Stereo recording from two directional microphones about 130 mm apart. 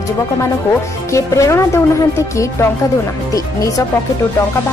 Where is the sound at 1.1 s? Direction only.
20° left (ahead or behind).